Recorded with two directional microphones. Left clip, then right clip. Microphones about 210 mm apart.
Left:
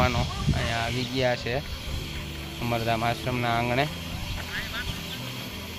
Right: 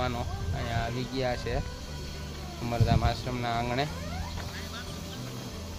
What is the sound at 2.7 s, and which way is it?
Speech, 40° left (ahead or behind).